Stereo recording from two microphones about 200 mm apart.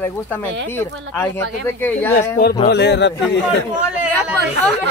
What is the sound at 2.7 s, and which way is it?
Speech, 60° left (ahead or behind).